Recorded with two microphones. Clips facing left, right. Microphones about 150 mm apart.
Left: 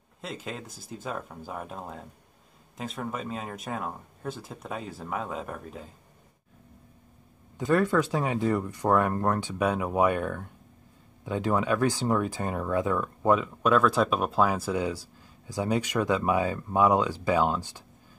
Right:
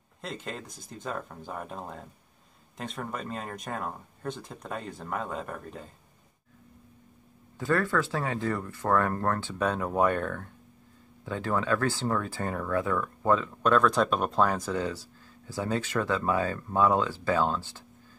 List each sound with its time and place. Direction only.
0.2 s speech: centre (ahead or behind)
7.5 s speech: 15° left (ahead or behind)